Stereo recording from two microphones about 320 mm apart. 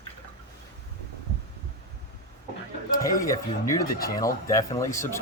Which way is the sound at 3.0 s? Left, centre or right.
Centre.